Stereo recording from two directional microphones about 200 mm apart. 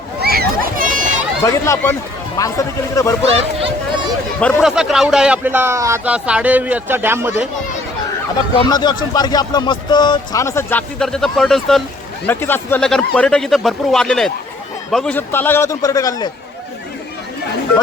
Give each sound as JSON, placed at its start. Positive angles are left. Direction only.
{"t": 0.2, "sound": "a sound", "side_deg": -50}
{"t": 1.5, "sound": "a man's voice", "side_deg": 15}
{"t": 4.4, "sound": "speech", "side_deg": 0}
{"t": 8.5, "sound": "a man's voice", "side_deg": 20}